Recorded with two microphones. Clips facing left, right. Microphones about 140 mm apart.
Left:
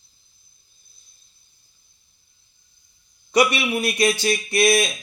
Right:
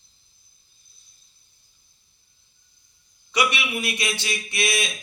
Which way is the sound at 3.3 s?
45° left (ahead or behind).